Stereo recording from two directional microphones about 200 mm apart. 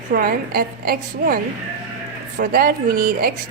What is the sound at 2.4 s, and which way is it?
Speech, 45° right (ahead or behind).